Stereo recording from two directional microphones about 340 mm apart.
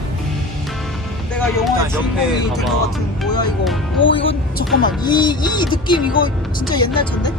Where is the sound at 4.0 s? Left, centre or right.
Left.